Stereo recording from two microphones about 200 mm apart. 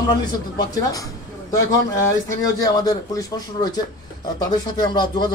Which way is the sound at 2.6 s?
20° left (ahead or behind).